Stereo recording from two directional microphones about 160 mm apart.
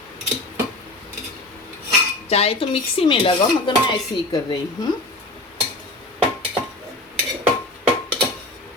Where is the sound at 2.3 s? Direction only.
40° left (ahead or behind).